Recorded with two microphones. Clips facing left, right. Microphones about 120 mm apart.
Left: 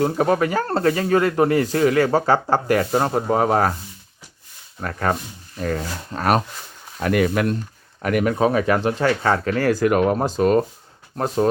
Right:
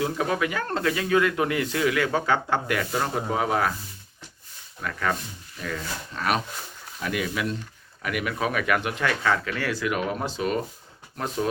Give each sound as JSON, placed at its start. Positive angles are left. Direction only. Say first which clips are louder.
{"t": 0.0, "sound": "speech", "louder": "left 7 dB", "side_deg": 40}
{"t": 4.8, "sound": "speech", "louder": "left 5 dB", "side_deg": 40}
{"t": 7.0, "sound": "speech", "louder": "left 9 dB", "side_deg": 55}
{"t": 8.0, "sound": "speech", "louder": "left 9 dB", "side_deg": 40}